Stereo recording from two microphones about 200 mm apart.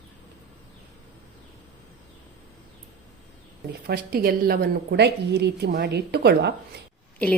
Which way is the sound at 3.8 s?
50° right (ahead or behind).